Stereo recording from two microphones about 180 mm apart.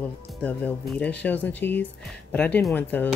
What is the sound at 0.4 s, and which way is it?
Speech, 10° left (ahead or behind).